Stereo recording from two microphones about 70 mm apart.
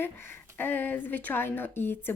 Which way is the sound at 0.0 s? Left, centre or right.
Left.